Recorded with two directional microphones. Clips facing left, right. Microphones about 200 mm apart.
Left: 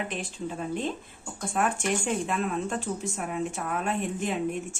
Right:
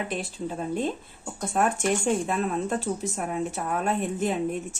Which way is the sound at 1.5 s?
40° right (ahead or behind).